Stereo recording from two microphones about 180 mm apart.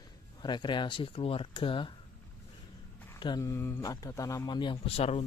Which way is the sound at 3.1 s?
25° left (ahead or behind).